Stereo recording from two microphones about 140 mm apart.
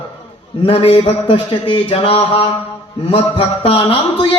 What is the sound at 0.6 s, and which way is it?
A man's voice, 40° left (ahead or behind).